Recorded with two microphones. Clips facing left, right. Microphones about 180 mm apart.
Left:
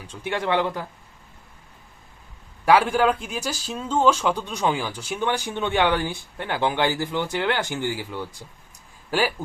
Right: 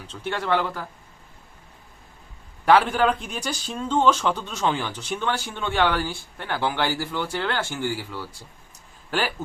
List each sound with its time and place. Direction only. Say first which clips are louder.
0.1 s speech: left 1 dB; 15° left (ahead or behind)
2.6 s speech: even; 10° left (ahead or behind)